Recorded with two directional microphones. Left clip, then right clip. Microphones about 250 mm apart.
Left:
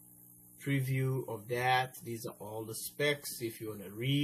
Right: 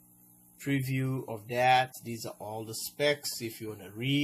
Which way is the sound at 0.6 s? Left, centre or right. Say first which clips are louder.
Right 3 dB; right.